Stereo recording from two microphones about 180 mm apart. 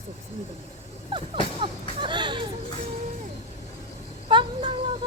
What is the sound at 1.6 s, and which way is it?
Music, 25° right (ahead or behind).